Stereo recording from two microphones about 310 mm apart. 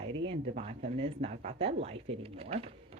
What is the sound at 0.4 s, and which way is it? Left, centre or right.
Speech, centre.